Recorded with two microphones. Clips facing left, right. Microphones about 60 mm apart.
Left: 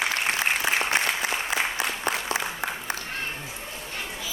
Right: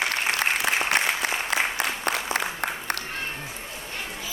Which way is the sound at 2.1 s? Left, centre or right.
Right.